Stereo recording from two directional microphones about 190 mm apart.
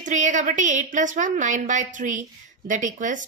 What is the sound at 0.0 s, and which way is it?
A woman's voice, 40° right (ahead or behind).